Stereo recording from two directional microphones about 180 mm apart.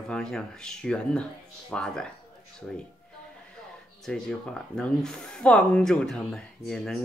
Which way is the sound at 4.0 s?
5° left (ahead or behind).